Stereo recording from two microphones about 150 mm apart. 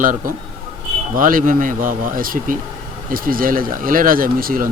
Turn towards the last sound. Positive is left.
turn(degrees=-70)  # may be behind; listen again after turning